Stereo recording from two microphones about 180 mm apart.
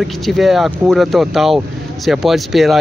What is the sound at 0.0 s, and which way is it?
Speech, centre (ahead or behind).